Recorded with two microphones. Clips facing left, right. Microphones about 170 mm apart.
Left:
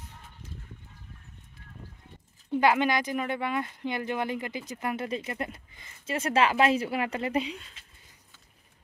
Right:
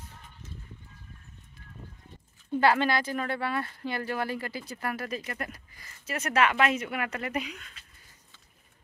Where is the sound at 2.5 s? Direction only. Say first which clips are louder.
Even; 15° left (ahead or behind).